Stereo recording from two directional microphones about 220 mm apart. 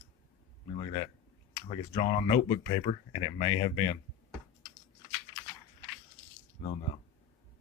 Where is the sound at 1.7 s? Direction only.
25° left (ahead or behind).